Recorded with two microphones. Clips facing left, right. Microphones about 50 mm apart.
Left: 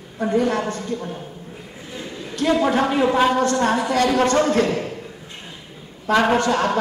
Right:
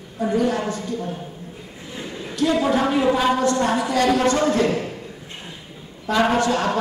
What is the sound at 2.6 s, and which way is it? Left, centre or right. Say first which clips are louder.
A woman's voice: left 1 dB; left.